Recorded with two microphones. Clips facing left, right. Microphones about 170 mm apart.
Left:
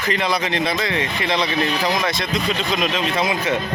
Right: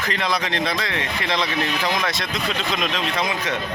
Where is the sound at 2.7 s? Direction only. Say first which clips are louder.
Left 4 dB; 5° left (ahead or behind).